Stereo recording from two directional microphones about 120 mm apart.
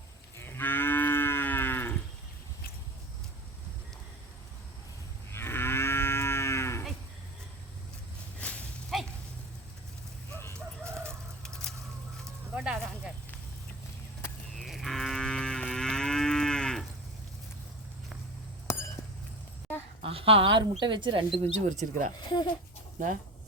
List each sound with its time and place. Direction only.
0.3 s moo: 20° left (ahead or behind)
5.3 s moo: 20° left (ahead or behind)
8.4 s a sound: 10° left (ahead or behind)
10.8 s bird: 20° right (ahead or behind)
11.4 s a sound: 5° left (ahead or behind)
14.5 s moo: centre (ahead or behind)
18.7 s a sound: 25° left (ahead or behind)
20.0 s speech: 50° right (ahead or behind)
21.5 s speech: 75° right (ahead or behind)
22.2 s speech: 35° left (ahead or behind)